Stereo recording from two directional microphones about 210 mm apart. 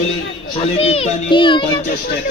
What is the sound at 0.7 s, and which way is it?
Speech, 30° left (ahead or behind).